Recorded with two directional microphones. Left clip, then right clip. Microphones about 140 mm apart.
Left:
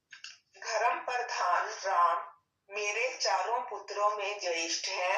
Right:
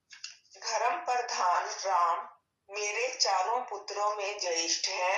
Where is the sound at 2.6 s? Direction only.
20° right (ahead or behind).